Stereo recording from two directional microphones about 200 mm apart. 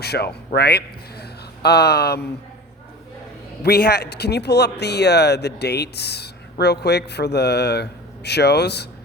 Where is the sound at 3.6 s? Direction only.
55° left (ahead or behind).